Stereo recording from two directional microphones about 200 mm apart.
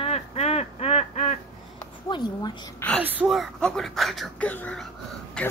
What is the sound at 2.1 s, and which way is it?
Speech, 20° left (ahead or behind).